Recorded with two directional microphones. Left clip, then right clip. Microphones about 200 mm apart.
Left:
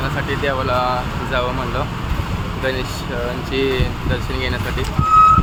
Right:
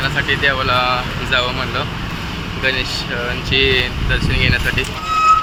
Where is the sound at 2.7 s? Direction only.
30° left (ahead or behind).